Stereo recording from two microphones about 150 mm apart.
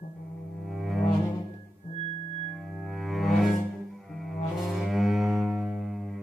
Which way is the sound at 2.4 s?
Centre (ahead or behind).